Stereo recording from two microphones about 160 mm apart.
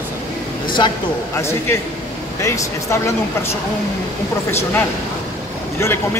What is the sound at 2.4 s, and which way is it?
Speech, 20° left (ahead or behind).